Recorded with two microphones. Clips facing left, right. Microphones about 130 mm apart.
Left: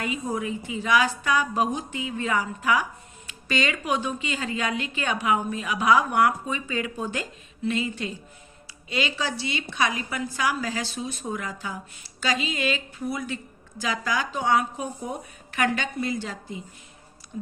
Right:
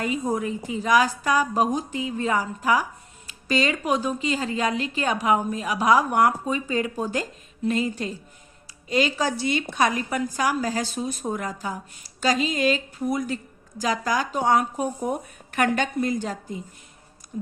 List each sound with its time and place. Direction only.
0.0 s a woman's voice: 40° right (ahead or behind)